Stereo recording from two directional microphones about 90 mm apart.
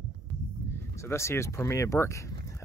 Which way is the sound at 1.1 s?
30° left (ahead or behind).